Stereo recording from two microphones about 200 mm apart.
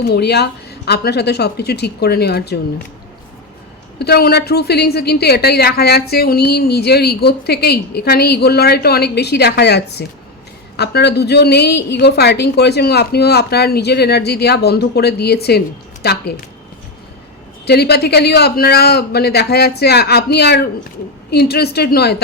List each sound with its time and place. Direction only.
0.0 s a woman's voice: 55° left (ahead or behind)
3.9 s a woman's voice: 55° left (ahead or behind)
17.7 s a woman's voice: 55° left (ahead or behind)